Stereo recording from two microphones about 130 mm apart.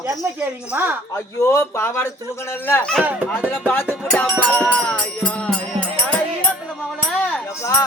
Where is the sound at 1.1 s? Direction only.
25° left (ahead or behind).